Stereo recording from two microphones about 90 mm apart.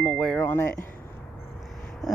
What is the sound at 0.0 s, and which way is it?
Music, 5° left (ahead or behind).